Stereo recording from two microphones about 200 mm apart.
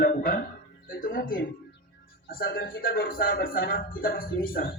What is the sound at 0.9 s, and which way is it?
Speech, 45° left (ahead or behind).